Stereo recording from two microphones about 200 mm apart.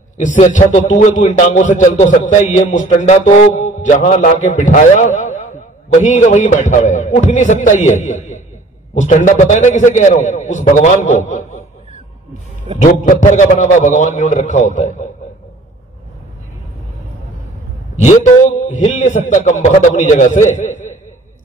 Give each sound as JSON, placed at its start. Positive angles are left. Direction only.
{"t": 0.2, "sound": "a man's voice", "side_deg": 40}
{"t": 17.9, "sound": "a man's voice", "side_deg": 40}